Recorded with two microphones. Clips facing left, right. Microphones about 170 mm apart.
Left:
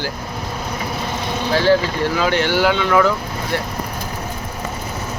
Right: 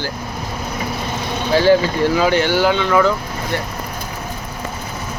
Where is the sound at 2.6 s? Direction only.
Centre (ahead or behind).